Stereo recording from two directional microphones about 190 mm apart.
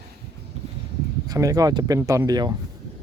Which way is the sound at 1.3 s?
20° right (ahead or behind).